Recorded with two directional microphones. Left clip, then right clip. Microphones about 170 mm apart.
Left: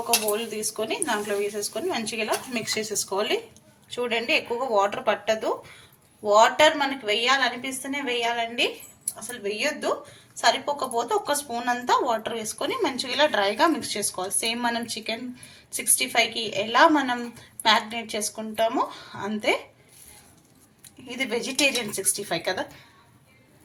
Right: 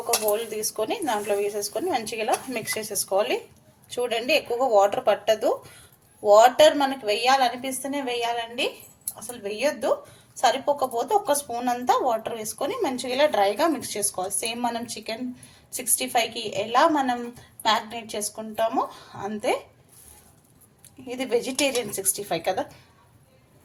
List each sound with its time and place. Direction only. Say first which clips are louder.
0.3 s a woman's voice: right 2 dB; 55° right (ahead or behind)
4.0 s a woman's voice: right 1 dB; 35° right (ahead or behind)
21.2 s a woman's voice: even; 35° right (ahead or behind)